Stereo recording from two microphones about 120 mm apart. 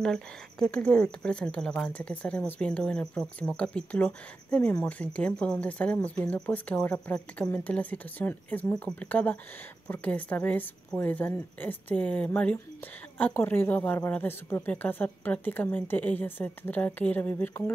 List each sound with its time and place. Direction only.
0.0 s speech: 5° left (ahead or behind)